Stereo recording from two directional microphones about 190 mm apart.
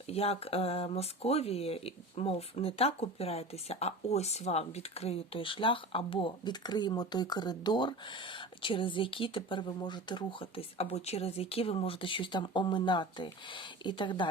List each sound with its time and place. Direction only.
0.1 s speech: 30° left (ahead or behind)